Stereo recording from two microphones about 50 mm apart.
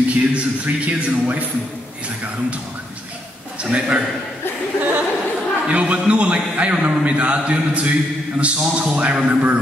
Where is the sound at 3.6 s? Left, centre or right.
Right.